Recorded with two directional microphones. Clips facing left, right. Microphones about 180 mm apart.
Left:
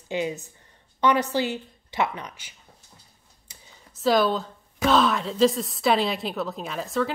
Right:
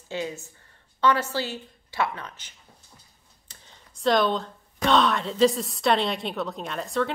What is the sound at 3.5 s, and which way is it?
Speech, 5° left (ahead or behind).